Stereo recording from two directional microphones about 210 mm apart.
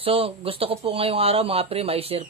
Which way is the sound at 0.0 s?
25° right (ahead or behind).